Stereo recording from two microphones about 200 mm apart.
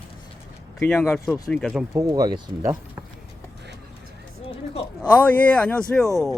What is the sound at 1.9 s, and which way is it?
Speech, 20° right (ahead or behind).